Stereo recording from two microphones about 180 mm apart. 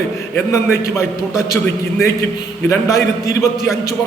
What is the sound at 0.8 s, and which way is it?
Speech, 15° left (ahead or behind).